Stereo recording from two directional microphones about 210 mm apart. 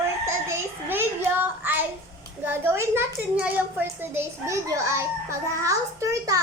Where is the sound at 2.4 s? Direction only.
10° right (ahead or behind).